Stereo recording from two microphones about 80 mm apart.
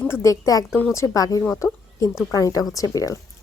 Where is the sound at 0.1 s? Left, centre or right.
Left.